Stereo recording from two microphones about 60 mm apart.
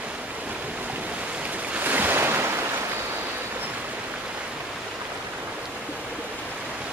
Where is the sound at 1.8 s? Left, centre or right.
Right.